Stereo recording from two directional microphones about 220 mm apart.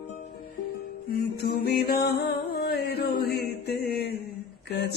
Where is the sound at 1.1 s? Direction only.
45° left (ahead or behind).